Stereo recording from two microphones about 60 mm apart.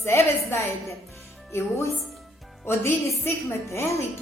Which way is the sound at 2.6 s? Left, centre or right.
Left.